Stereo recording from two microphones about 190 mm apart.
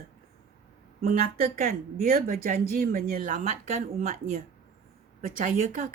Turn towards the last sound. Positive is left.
turn(degrees=-45)  # may be behind; listen again after turning